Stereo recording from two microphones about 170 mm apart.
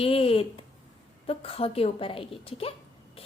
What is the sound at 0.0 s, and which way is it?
A woman's voice, 35° left (ahead or behind).